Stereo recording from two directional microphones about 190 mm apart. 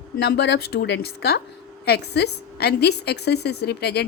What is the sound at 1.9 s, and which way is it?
A woman's voice, 60° left (ahead or behind).